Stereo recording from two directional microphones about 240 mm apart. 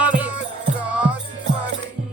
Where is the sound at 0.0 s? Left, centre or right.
Centre.